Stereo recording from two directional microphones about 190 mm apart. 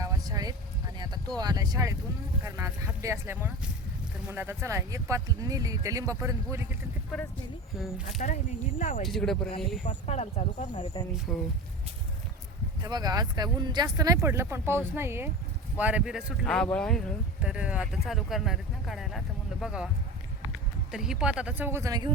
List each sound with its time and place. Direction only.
0.0 s a sound: 20° right (ahead or behind)
1.4 s speech: 20° right (ahead or behind)
8.2 s speech: 45° left (ahead or behind)
9.0 s speech: centre (ahead or behind)
9.8 s speech: 35° left (ahead or behind)
11.3 s speech: 10° left (ahead or behind)
12.8 s speech: 20° right (ahead or behind); by 19.9 s 5° right (ahead or behind)
20.9 s speech: 5° right (ahead or behind); by 22.1 s 20° right (ahead or behind)